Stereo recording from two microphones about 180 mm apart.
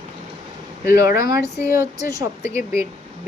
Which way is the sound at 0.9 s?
15° right (ahead or behind).